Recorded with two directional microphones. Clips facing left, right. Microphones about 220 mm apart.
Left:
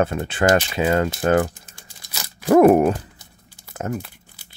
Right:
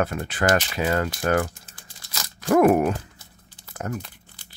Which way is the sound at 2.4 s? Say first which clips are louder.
Left 5 dB; 35° left (ahead or behind).